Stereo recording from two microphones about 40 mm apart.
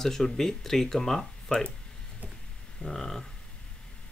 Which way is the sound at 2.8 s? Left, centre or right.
Centre.